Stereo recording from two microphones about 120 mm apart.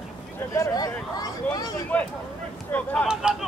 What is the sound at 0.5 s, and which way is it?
Speech, 30° left (ahead or behind).